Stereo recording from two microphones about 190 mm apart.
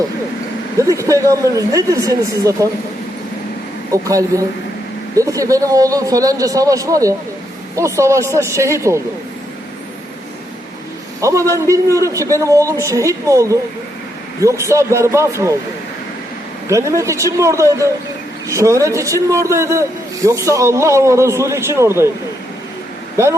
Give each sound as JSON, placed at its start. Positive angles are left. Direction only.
{"t": 0.8, "sound": "a man's voice", "side_deg": -15}
{"t": 3.9, "sound": "a man's voice", "side_deg": -15}
{"t": 11.2, "sound": "a man's voice", "side_deg": -15}
{"t": 16.6, "sound": "a man's voice", "side_deg": -15}